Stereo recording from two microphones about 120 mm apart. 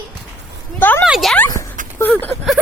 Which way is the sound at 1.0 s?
Centre (ahead or behind).